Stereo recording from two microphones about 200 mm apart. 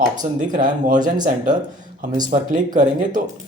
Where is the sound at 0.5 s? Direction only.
40° right (ahead or behind).